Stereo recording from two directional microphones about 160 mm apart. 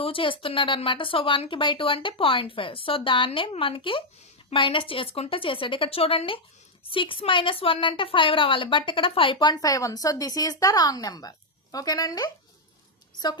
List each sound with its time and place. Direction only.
0.0 s a woman's voice: 35° left (ahead or behind)